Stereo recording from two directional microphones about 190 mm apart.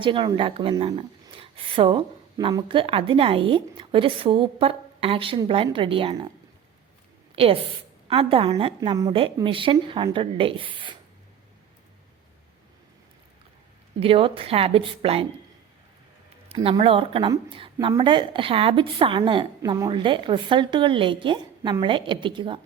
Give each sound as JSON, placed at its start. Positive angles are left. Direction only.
{"t": 0.0, "sound": "a woman's voice", "side_deg": -25}
{"t": 7.3, "sound": "a woman's voice", "side_deg": -30}
{"t": 14.0, "sound": "a woman's voice", "side_deg": -30}
{"t": 16.5, "sound": "a woman's voice", "side_deg": -30}